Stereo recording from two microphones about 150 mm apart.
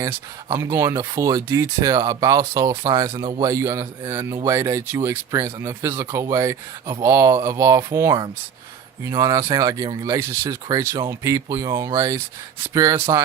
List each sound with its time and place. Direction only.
0.5 s speech: 15° right (ahead or behind)